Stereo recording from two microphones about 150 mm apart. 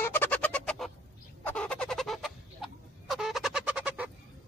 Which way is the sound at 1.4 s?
5° left (ahead or behind).